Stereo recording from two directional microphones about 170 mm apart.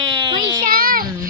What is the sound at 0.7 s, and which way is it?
Child singing, 60° right (ahead or behind).